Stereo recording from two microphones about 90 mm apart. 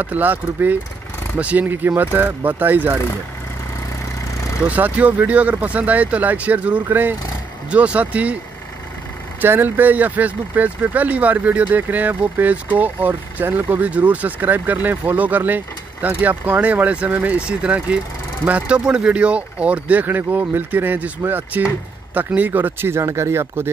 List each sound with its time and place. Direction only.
0.0 s speech: 20° right (ahead or behind)
4.6 s speech: 15° right (ahead or behind)
9.4 s speech: 20° right (ahead or behind)